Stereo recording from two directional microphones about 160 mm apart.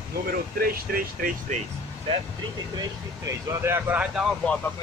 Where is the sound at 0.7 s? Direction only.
65° right (ahead or behind).